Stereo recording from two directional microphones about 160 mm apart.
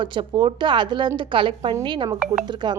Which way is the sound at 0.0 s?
30° right (ahead or behind).